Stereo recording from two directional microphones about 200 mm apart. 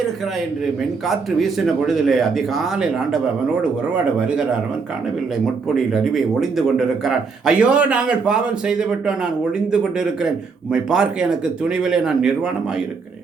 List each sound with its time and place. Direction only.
1.0 s a man's voice: centre (ahead or behind)
5.6 s a man's voice: centre (ahead or behind)